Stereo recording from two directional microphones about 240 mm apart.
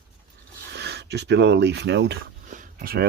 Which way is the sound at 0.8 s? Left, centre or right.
Right.